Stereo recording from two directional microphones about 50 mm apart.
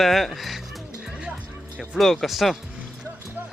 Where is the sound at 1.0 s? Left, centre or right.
Centre.